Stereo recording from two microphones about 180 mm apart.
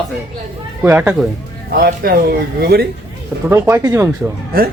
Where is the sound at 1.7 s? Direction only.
55° right (ahead or behind).